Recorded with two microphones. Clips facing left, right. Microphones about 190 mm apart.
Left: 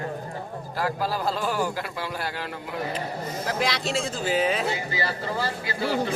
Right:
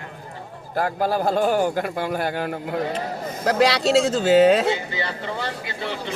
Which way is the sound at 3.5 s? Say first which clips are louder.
Right 10 dB; 75° right (ahead or behind).